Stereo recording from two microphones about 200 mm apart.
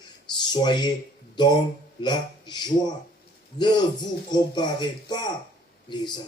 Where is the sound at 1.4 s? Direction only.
20° left (ahead or behind).